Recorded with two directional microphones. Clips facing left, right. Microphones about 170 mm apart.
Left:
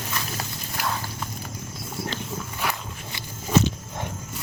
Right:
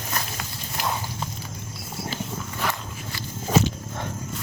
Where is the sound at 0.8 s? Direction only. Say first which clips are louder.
Right 1 dB; 20° right (ahead or behind).